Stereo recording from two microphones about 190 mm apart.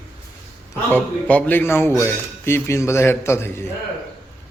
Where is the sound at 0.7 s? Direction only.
10° left (ahead or behind).